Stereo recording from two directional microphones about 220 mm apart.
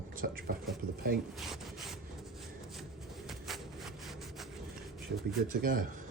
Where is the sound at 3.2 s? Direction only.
Centre (ahead or behind).